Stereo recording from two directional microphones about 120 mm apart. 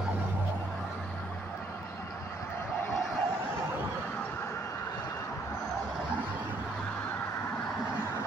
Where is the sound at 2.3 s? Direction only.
15° left (ahead or behind).